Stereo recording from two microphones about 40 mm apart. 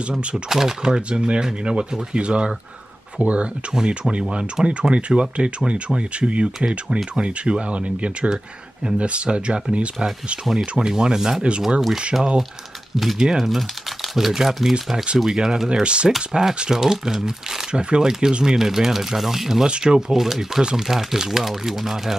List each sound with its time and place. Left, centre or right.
0.5 s speech: centre
4.9 s speech: right
12.9 s speech: centre
15.7 s speech: right
16.1 s speech: centre
17.7 s speech: right
19.7 s speech: centre
20.1 s speech: centre